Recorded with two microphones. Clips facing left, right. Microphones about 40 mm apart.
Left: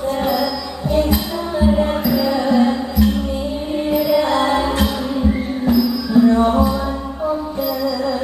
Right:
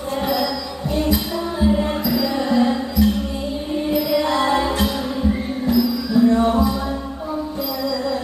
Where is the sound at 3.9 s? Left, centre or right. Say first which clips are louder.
Left 3 dB; centre.